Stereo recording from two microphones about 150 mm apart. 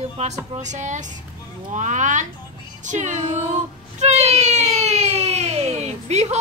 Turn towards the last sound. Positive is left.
turn(degrees=-50)  # may be behind; listen again after turning